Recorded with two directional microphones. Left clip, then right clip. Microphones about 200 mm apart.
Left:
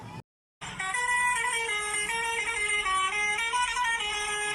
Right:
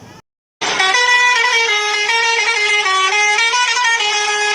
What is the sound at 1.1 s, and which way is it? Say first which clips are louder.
Vehicle horn: right 15 dB; 55° right (ahead or behind).